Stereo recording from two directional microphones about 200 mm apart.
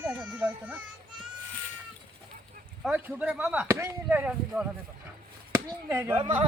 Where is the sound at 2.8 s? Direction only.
5° right (ahead or behind).